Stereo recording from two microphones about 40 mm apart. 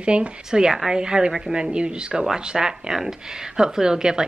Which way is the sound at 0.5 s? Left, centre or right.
Centre.